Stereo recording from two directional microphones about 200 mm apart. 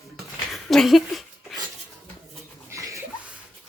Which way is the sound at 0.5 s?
Centre (ahead or behind).